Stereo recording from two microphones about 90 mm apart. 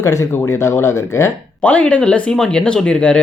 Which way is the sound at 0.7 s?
30° left (ahead or behind).